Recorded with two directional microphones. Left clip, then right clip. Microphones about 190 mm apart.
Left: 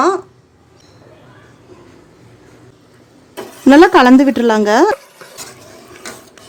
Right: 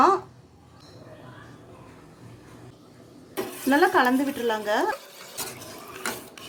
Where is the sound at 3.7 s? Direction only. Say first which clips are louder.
Left 14 dB; 50° left (ahead or behind).